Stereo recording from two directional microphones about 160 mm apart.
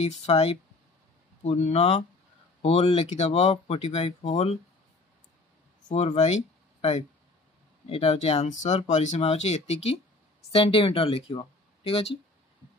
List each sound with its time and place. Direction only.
0.0 s speech: 40° left (ahead or behind)
5.9 s speech: 45° left (ahead or behind)